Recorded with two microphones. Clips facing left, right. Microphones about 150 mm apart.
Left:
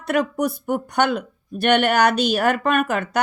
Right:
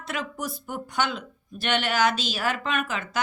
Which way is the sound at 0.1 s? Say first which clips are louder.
Left 11 dB; 60° left (ahead or behind).